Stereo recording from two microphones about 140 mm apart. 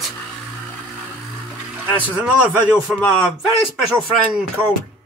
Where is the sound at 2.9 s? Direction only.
5° right (ahead or behind).